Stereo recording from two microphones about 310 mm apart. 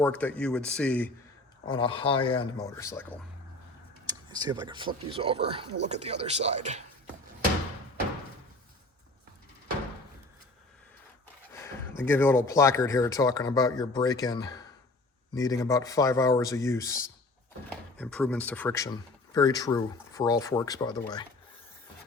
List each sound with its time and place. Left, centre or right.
0.0 s speech: centre
1.6 s speech: centre
4.0 s speech: centre
11.5 s a sound: centre
12.5 s speech: centre